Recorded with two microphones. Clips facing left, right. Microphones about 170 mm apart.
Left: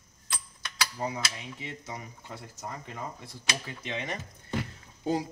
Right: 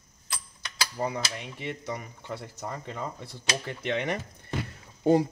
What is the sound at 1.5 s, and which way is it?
Speech, 65° right (ahead or behind).